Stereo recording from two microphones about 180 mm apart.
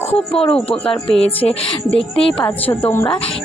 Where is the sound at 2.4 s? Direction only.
10° left (ahead or behind).